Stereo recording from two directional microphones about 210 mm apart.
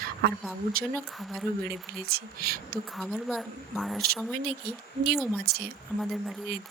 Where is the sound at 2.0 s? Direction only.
45° right (ahead or behind).